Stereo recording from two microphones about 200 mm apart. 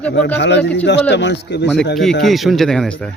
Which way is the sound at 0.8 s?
60° left (ahead or behind).